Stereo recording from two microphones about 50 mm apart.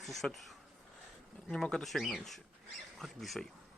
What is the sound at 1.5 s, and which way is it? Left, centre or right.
Speech, centre.